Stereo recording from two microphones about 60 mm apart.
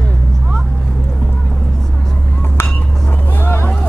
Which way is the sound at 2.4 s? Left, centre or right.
Left.